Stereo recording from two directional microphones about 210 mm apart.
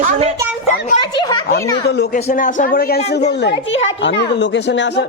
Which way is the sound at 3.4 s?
60° left (ahead or behind).